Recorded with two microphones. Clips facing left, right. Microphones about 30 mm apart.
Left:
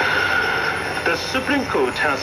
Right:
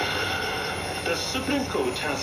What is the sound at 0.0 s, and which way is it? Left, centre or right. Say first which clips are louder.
Radio: left 8 dB; left.